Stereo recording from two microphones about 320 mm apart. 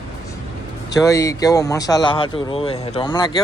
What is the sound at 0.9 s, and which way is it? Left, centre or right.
A man's voice, centre.